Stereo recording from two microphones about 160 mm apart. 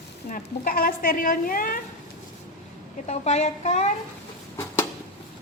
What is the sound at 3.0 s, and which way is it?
Speech, 45° left (ahead or behind).